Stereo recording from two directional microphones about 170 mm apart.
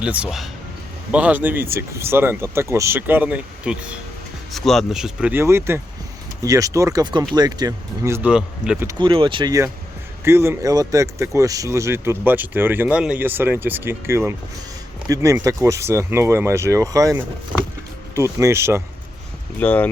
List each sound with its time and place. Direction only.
0.0 s speech: 5° right (ahead or behind)
8.9 s speech: 30° right (ahead or behind)
17.5 s music: 5° left (ahead or behind)
18.1 s speech: 15° right (ahead or behind)
19.5 s speech: 10° left (ahead or behind)